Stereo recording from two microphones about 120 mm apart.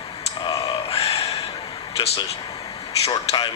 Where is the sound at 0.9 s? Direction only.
55° left (ahead or behind).